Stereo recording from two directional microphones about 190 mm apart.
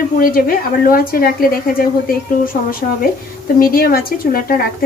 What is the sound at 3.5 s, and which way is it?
A woman's voice, 50° left (ahead or behind).